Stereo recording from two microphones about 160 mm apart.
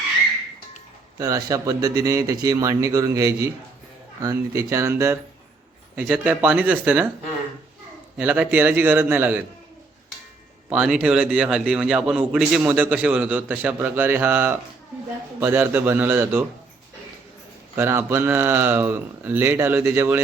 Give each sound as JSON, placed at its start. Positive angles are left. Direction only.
{"t": 1.2, "sound": "speech", "side_deg": -20}
{"t": 8.2, "sound": "speech", "side_deg": -10}
{"t": 10.7, "sound": "a man's voice", "side_deg": -5}
{"t": 17.7, "sound": "speech", "side_deg": -15}